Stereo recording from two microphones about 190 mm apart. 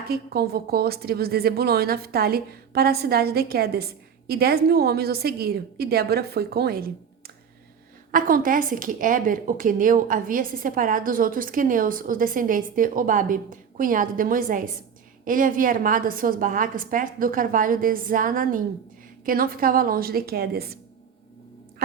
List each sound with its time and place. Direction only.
0.1 s a woman's voice: 55° right (ahead or behind)
8.1 s a woman's voice: 45° right (ahead or behind)
21.8 s music: 55° right (ahead or behind)